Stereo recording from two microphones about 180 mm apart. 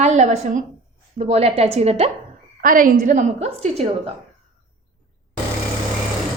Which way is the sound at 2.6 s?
50° right (ahead or behind).